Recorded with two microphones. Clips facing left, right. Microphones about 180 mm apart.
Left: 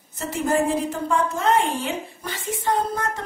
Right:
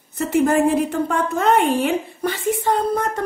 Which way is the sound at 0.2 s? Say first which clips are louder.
Right 6 dB; 60° right (ahead or behind).